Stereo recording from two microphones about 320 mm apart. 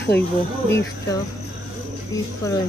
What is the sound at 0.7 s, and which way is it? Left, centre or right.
Speech, centre.